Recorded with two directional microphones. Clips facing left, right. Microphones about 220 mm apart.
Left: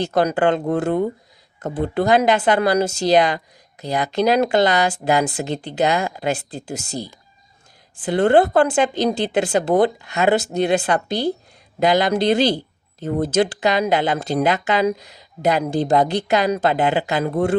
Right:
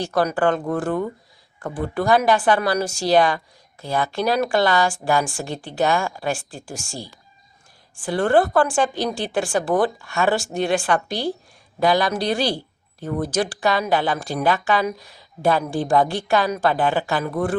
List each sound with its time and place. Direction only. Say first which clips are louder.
0.0 s speech: left 2 dB; 20° left (ahead or behind)